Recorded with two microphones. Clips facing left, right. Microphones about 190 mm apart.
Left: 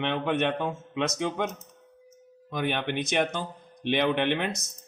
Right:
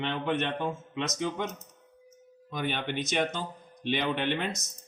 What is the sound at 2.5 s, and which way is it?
Speech, 60° left (ahead or behind).